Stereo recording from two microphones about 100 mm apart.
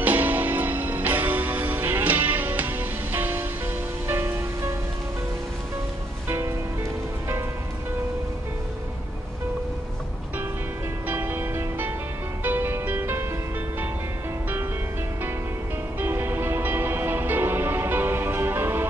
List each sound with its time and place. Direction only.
0.0 s music: 20° right (ahead or behind)
6.2 s music: 25° right (ahead or behind)
11.1 s music: 20° right (ahead or behind)
16.0 s music: 25° right (ahead or behind)